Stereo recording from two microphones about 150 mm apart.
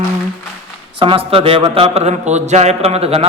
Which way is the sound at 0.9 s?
35° right (ahead or behind).